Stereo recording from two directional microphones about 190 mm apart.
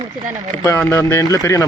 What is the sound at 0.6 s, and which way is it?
Speech, 15° left (ahead or behind).